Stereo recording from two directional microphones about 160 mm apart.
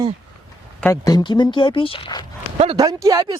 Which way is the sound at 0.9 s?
20° left (ahead or behind).